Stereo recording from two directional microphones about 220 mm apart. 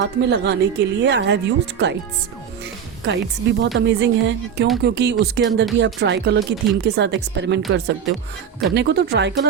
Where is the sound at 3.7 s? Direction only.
50° right (ahead or behind).